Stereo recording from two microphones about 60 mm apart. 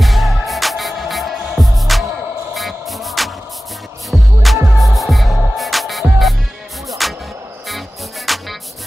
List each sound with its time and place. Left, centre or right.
0.0 s music: centre
2.5 s a sound: centre
4.1 s music: centre
8.3 s music: centre